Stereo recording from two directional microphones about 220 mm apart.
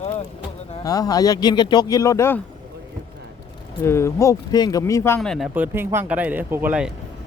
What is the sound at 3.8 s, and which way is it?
Speech, 10° left (ahead or behind).